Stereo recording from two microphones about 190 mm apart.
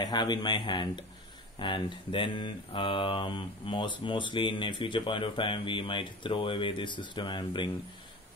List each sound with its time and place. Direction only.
0.0 s speech: 20° left (ahead or behind)